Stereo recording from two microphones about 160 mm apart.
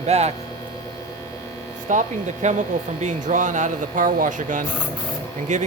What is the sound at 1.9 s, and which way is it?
Speech, 50° right (ahead or behind).